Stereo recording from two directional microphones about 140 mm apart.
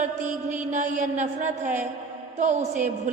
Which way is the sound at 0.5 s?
65° right (ahead or behind).